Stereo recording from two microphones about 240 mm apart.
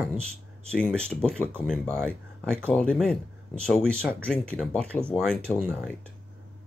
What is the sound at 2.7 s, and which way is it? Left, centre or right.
Speech, centre.